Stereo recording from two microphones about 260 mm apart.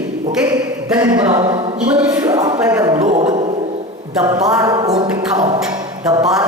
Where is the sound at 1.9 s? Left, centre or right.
Centre.